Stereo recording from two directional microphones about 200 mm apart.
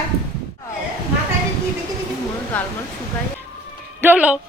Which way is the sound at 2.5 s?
5° left (ahead or behind).